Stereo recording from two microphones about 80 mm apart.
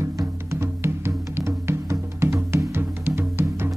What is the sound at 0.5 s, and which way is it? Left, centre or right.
Music, right.